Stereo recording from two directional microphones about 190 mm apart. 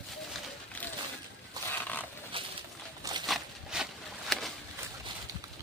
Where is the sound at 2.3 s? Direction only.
30° right (ahead or behind).